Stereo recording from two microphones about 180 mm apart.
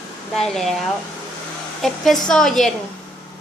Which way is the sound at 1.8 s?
Centre (ahead or behind).